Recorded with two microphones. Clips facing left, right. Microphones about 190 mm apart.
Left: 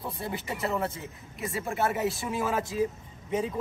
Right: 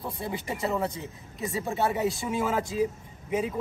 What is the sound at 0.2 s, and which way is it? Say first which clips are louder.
Speech: right 2 dB; 20° right (ahead or behind).